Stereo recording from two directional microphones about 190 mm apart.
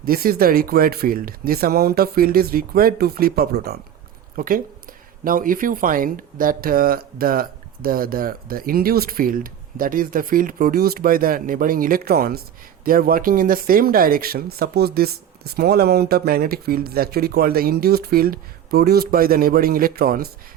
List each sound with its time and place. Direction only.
0.0 s speech: 50° right (ahead or behind)